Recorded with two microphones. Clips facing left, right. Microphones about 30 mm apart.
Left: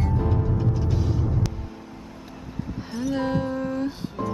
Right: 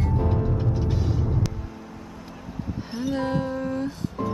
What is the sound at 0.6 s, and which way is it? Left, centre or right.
Vehicle, right.